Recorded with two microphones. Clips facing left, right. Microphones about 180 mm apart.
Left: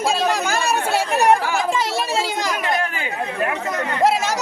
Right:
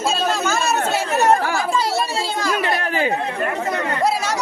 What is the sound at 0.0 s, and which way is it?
Chatter, 15° left (ahead or behind).